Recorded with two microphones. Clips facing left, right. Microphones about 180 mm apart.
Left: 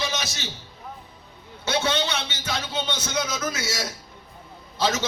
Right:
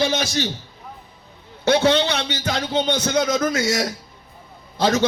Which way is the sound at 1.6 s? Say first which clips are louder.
Right 8 dB; 60° right (ahead or behind).